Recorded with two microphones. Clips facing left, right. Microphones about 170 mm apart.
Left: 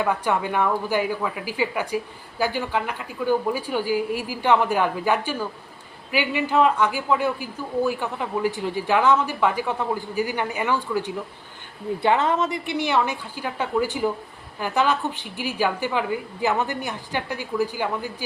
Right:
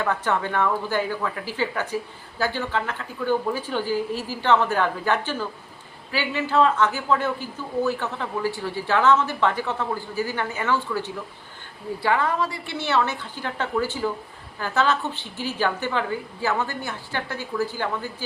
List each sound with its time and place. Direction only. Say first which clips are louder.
0.0 s a woman's voice: left 1 dB; 10° left (ahead or behind)